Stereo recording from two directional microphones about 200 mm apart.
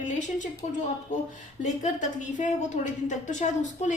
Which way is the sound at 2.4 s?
40° left (ahead or behind).